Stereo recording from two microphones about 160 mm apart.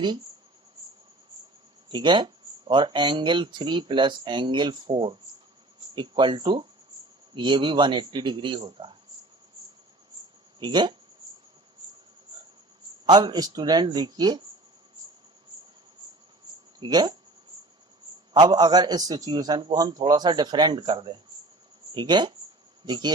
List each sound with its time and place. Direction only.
1.9 s speech: 30° right (ahead or behind)
10.6 s speech: 30° right (ahead or behind)
13.1 s speech: 25° right (ahead or behind)
16.8 s speech: 30° right (ahead or behind)
18.3 s speech: 25° right (ahead or behind)